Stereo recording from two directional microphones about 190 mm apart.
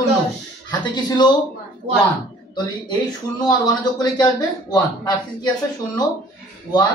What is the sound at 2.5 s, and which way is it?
Speech, 20° left (ahead or behind).